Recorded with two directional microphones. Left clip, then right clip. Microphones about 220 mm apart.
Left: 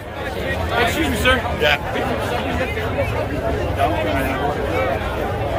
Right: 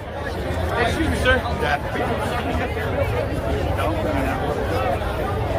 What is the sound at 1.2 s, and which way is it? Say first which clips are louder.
Speech: left 3 dB; 50° left (ahead or behind).